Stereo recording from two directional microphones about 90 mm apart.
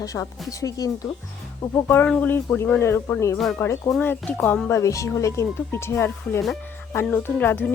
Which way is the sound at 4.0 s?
20° left (ahead or behind).